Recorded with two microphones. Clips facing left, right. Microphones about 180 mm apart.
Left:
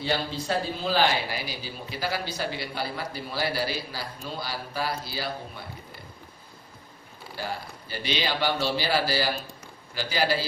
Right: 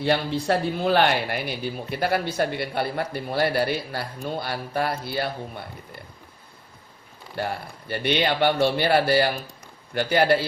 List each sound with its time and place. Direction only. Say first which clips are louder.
0.0 s speech: right 6 dB; 60° right (ahead or behind)
7.3 s speech: right 5 dB; 60° right (ahead or behind)